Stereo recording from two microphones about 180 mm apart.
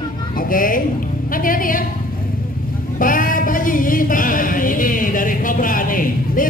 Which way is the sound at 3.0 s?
50° left (ahead or behind).